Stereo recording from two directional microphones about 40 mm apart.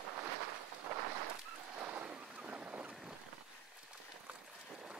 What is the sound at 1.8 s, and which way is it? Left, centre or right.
Waves, right.